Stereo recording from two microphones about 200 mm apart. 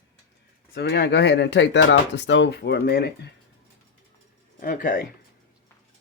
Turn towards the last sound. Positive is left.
turn(degrees=40)  # may be behind; listen again after turning